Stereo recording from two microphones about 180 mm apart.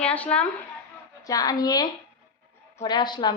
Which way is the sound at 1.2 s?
20° left (ahead or behind).